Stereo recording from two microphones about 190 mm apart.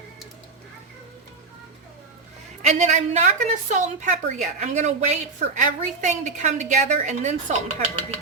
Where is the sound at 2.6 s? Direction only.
35° right (ahead or behind).